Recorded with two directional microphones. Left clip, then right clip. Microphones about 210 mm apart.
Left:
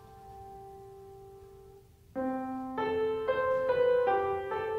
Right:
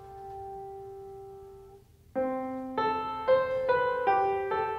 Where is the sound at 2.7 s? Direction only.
40° right (ahead or behind).